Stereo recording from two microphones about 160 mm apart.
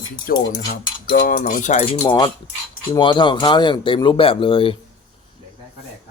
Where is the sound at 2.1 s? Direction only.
30° left (ahead or behind).